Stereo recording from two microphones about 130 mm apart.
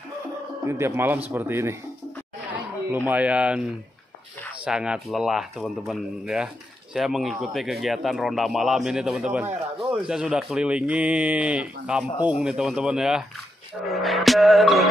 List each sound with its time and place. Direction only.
0.7 s speech: 20° right (ahead or behind)
4.6 s speech: 5° right (ahead or behind)